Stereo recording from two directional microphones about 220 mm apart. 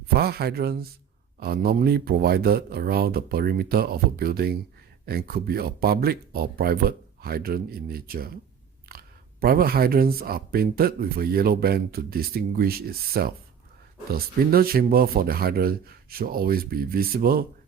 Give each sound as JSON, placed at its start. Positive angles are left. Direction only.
{"t": 0.1, "sound": "speech", "side_deg": -45}
{"t": 8.9, "sound": "a sound", "side_deg": -45}
{"t": 9.4, "sound": "speech", "side_deg": -45}